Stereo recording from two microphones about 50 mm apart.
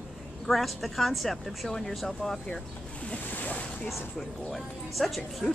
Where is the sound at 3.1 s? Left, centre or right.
Left.